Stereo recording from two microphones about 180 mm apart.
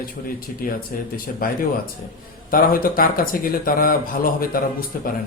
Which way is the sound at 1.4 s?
50° left (ahead or behind).